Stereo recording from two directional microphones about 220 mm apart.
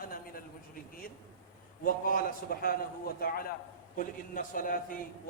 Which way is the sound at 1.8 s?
40° left (ahead or behind).